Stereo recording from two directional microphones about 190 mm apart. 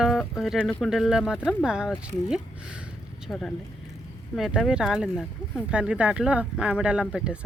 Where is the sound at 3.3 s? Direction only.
5° left (ahead or behind).